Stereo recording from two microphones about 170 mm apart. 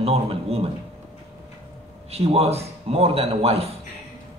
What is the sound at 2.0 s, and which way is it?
Speech, 40° right (ahead or behind).